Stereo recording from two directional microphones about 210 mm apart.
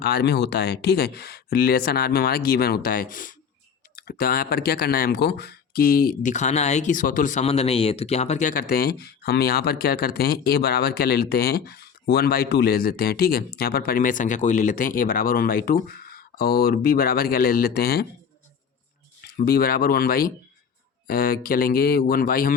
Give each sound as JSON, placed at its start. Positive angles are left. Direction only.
{"t": 0.0, "sound": "speech", "side_deg": 50}
{"t": 19.2, "sound": "speech", "side_deg": 45}